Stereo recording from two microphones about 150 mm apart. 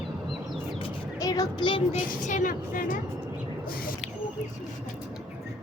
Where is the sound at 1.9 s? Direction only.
55° left (ahead or behind).